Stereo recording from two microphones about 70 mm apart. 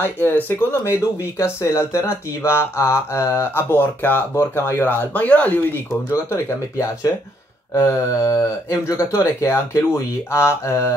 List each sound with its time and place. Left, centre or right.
0.0 s speech: left
1.4 s speech: left
4.8 s speech: left
6.1 s speech: left